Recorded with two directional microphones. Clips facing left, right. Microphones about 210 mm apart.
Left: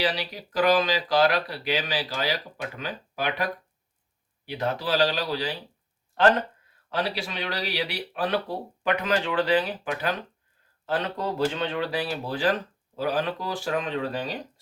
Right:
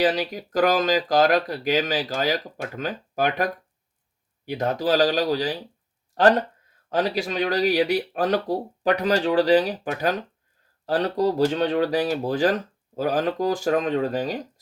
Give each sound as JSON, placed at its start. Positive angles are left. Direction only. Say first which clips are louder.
{"t": 0.0, "sound": "speech", "louder": "right 6 dB", "side_deg": -45}